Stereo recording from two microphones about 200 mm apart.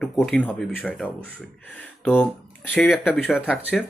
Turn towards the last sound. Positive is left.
turn(degrees=-5)  # may be behind; listen again after turning